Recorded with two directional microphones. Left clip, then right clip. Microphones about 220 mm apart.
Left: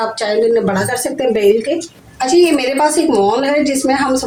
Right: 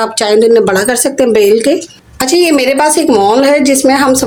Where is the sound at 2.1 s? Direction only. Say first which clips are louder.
Right 3 dB; 50° right (ahead or behind).